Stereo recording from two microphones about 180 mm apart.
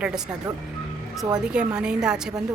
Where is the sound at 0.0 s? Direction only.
5° right (ahead or behind).